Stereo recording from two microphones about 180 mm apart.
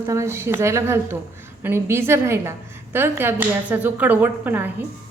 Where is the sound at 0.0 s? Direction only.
15° right (ahead or behind).